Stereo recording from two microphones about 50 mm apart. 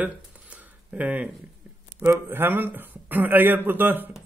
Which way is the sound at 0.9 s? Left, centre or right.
Right.